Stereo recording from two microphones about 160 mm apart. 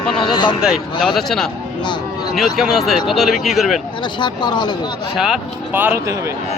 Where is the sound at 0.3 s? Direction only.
30° left (ahead or behind).